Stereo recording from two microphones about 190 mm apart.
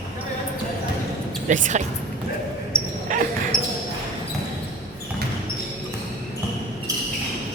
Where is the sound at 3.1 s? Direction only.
45° right (ahead or behind).